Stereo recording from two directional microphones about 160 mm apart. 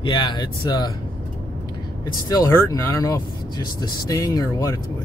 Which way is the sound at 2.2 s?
20° left (ahead or behind).